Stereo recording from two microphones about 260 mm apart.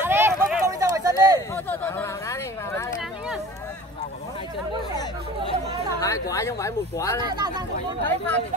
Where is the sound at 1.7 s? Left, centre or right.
Centre.